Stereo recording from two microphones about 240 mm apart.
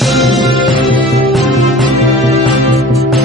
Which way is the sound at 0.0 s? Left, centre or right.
Centre.